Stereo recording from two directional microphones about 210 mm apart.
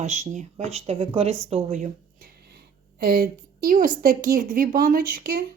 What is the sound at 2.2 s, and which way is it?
A woman's voice, 50° right (ahead or behind).